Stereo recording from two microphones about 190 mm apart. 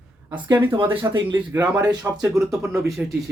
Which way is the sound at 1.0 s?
25° right (ahead or behind).